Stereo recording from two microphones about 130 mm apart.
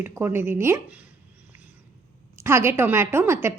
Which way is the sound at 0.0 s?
15° right (ahead or behind).